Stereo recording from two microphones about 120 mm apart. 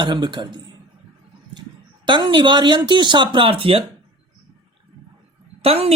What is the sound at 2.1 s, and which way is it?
Speech, 40° right (ahead or behind).